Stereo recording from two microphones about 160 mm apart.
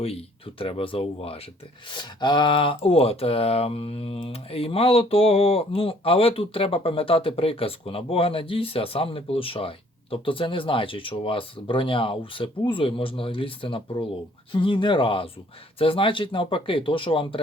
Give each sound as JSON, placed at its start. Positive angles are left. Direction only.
{"t": 0.0, "sound": "speech", "side_deg": 35}